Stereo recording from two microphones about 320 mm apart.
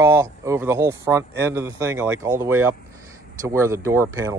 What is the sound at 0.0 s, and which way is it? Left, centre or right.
Speech, centre.